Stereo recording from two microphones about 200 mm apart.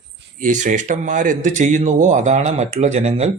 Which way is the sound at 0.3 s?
40° right (ahead or behind).